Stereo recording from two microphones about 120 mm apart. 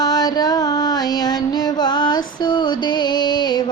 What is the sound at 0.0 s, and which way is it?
Music, 35° left (ahead or behind).